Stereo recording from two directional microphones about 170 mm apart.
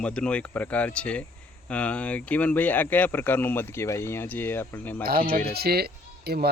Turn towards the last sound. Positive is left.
turn(degrees=-70)  # may be behind; listen again after turning